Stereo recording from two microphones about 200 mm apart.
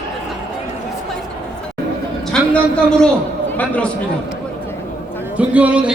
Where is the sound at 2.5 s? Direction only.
5° left (ahead or behind).